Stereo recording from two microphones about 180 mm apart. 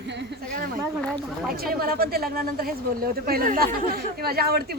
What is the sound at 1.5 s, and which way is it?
Speech, 55° right (ahead or behind).